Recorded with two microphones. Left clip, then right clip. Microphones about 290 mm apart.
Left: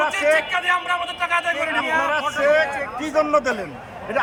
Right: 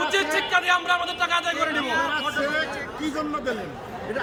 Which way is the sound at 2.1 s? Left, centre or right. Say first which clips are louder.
Left 7 dB; centre.